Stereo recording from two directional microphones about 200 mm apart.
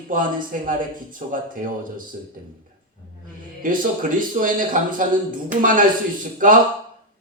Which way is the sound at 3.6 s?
45° right (ahead or behind).